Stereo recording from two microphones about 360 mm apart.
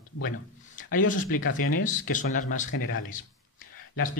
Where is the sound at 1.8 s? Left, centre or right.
Left.